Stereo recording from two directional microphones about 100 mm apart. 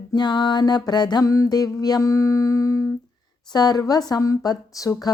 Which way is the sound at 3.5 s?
45° left (ahead or behind).